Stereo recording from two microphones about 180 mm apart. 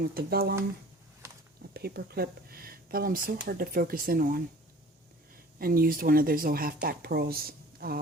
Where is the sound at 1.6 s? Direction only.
60° right (ahead or behind).